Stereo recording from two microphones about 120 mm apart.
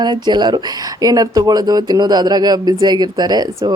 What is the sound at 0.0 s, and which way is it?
Speech, 40° right (ahead or behind).